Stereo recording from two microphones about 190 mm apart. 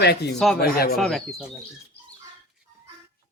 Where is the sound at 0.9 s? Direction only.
Centre (ahead or behind).